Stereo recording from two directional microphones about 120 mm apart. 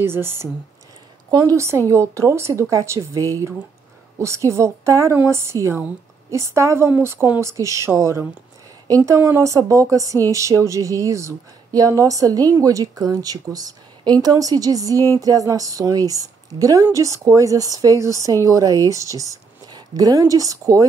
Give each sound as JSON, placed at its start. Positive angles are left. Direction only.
{"t": 0.0, "sound": "speech", "side_deg": -20}